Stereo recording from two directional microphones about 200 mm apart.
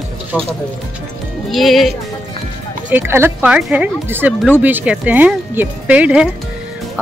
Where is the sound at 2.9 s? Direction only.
10° right (ahead or behind).